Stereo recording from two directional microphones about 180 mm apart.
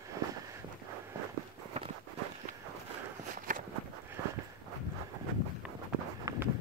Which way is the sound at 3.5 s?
45° right (ahead or behind).